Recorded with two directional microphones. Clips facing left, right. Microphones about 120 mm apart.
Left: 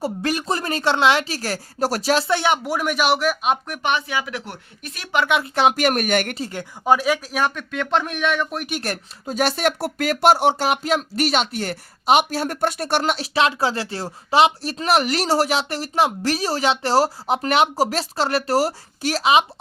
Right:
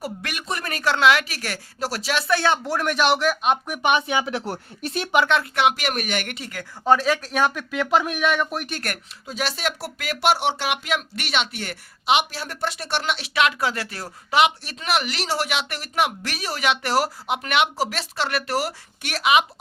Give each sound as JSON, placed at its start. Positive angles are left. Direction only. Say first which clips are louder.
{"t": 0.0, "sound": "speech", "louder": "left 8 dB", "side_deg": 30}
{"t": 2.2, "sound": "speech", "louder": "left 1 dB", "side_deg": 20}
{"t": 3.8, "sound": "speech", "louder": "right 2 dB", "side_deg": -15}
{"t": 5.5, "sound": "speech", "louder": "left 4 dB", "side_deg": 40}
{"t": 6.8, "sound": "speech", "louder": "left 1 dB", "side_deg": 10}
{"t": 9.2, "sound": "speech", "louder": "left 6 dB", "side_deg": 45}